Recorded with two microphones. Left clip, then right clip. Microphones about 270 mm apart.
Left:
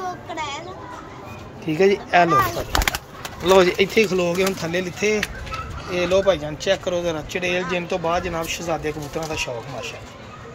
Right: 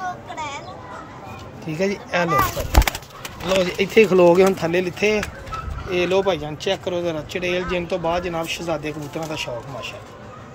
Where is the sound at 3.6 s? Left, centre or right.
Centre.